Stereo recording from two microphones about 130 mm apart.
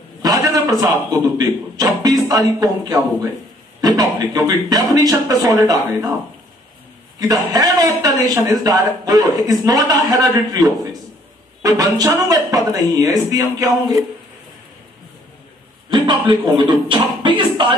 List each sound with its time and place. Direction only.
0.2 s a sound: 30° right (ahead or behind)
1.4 s a man's voice: 30° right (ahead or behind)
7.2 s a man's voice: 30° right (ahead or behind)
15.9 s a man's voice: 35° right (ahead or behind)
16.8 s music: 40° right (ahead or behind)